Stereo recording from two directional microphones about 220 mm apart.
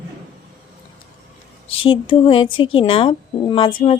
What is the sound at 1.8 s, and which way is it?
Speech, 25° left (ahead or behind).